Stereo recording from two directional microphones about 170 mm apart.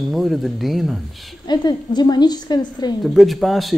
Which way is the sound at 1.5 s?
25° left (ahead or behind).